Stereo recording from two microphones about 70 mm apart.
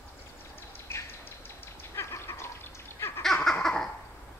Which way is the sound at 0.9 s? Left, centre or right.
Left.